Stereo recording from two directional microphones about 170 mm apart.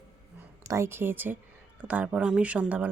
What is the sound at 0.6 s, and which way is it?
Speech, 15° right (ahead or behind).